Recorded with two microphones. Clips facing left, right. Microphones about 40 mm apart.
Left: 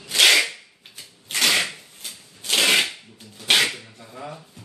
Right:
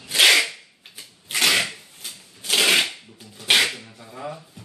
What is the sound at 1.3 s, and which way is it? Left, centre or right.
Shuffling cards, centre.